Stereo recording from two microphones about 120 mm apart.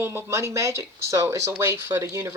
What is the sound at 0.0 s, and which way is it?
Speech, 20° right (ahead or behind).